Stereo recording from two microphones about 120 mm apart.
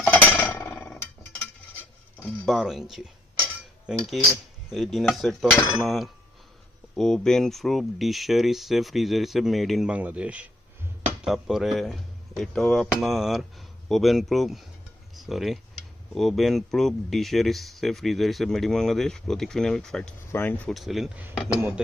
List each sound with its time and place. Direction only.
0.0 s a sound: 10° left (ahead or behind)
2.5 s speech: centre (ahead or behind)
9.9 s speech: 10° right (ahead or behind); by 20.1 s 5° left (ahead or behind)
20.3 s speech: 15° left (ahead or behind)
20.7 s speech: centre (ahead or behind)